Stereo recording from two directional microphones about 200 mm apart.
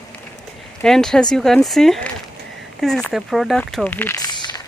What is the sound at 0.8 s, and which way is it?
Speech, 5° left (ahead or behind).